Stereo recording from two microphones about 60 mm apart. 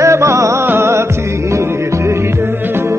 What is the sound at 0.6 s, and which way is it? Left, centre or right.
Music, right.